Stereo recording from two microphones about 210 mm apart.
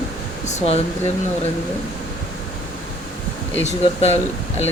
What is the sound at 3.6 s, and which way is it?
Speech, 30° left (ahead or behind).